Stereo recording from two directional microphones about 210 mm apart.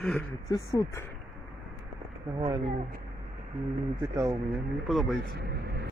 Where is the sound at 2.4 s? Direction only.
15° right (ahead or behind).